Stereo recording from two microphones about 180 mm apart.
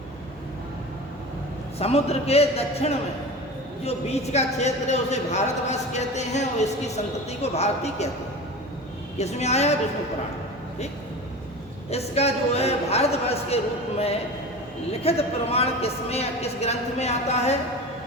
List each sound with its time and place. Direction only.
1.8 s a woman's voice: 35° left (ahead or behind)
9.1 s a woman's voice: 35° left (ahead or behind)
11.9 s a woman's voice: 35° left (ahead or behind)
15.0 s a woman's voice: 35° left (ahead or behind)